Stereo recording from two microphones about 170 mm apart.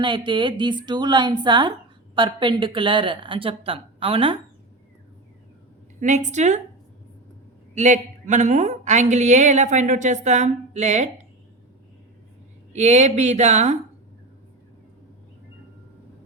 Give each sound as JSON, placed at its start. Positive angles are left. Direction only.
{"t": 0.0, "sound": "speech", "side_deg": -30}
{"t": 6.0, "sound": "speech", "side_deg": -45}
{"t": 7.8, "sound": "speech", "side_deg": -45}
{"t": 12.7, "sound": "speech", "side_deg": -40}